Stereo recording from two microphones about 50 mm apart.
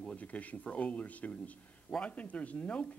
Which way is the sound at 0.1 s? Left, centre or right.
Left.